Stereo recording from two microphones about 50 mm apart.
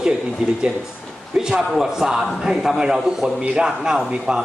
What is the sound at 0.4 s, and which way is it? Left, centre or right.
A man's voice, centre.